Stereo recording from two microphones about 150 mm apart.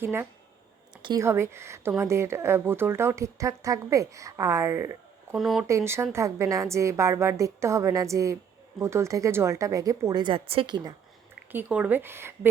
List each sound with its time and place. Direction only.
0.0 s a woman's voice: 15° right (ahead or behind)
5.4 s speech: centre (ahead or behind)
5.6 s speech: 20° right (ahead or behind)
11.5 s a woman's voice: 10° right (ahead or behind)